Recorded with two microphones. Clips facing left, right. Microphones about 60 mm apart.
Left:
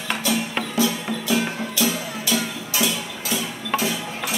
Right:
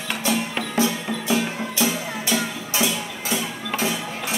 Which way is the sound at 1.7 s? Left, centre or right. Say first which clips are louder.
Even; right.